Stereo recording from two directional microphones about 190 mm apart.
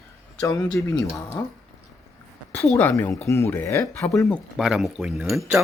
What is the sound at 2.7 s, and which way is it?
A woman's voice, 10° left (ahead or behind).